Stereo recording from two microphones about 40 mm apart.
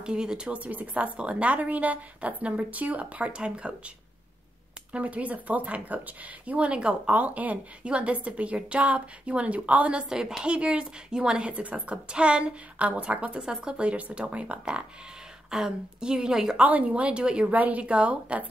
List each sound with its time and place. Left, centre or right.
0.0 s a woman's voice: right
0.5 s a woman's voice: right
4.9 s a woman's voice: right
7.1 s a woman's voice: right
10.0 s a woman's voice: centre
10.4 s a woman's voice: right
11.4 s a woman's voice: right; by 16.5 s centre
16.6 s a woman's voice: right
17.5 s a woman's voice: right